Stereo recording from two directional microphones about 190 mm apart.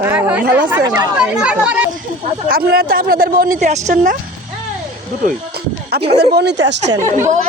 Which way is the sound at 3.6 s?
40° right (ahead or behind).